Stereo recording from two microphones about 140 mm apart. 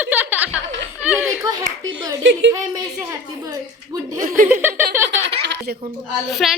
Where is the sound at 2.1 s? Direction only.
25° right (ahead or behind).